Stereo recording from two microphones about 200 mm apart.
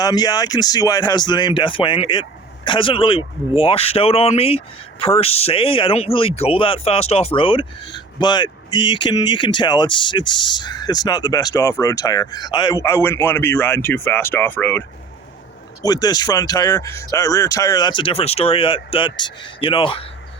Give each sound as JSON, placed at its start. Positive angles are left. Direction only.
{"t": 0.0, "sound": "speech", "side_deg": 20}